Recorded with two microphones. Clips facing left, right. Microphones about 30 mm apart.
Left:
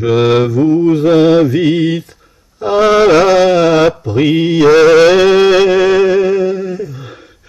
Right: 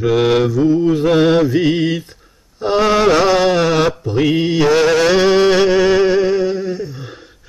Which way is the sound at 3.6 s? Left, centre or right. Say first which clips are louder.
Left 5 dB; left.